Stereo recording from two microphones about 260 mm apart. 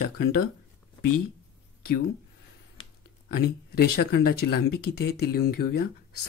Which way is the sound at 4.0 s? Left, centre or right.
Left.